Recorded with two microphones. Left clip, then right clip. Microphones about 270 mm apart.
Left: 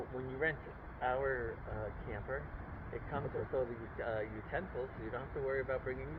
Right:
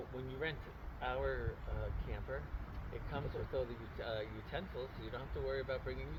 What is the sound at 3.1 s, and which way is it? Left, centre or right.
Speech, right.